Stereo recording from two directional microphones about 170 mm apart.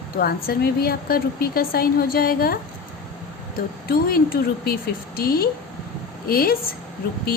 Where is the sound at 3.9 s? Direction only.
60° left (ahead or behind).